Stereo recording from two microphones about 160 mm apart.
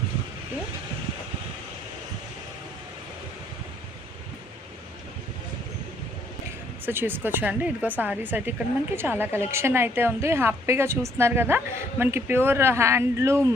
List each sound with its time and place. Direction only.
6.8 s a woman's voice: 15° right (ahead or behind)